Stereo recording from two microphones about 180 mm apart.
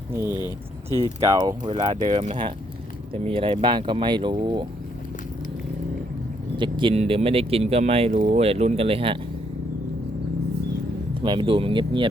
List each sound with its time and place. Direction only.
0.3 s speech: 20° left (ahead or behind)
1.2 s speech: 20° right (ahead or behind)
6.6 s speech: 25° right (ahead or behind)
11.1 s speech: 30° right (ahead or behind)